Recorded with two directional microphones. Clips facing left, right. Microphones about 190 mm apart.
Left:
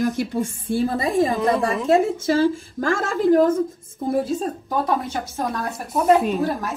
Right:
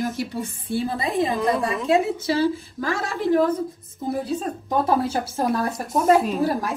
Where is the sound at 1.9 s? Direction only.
50° left (ahead or behind).